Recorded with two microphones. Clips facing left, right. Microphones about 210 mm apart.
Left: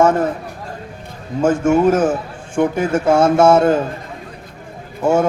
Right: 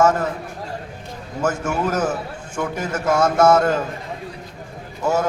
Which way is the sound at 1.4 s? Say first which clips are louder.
Left 8 dB; 30° left (ahead or behind).